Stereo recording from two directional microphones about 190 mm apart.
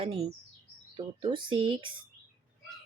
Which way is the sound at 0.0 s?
30° right (ahead or behind).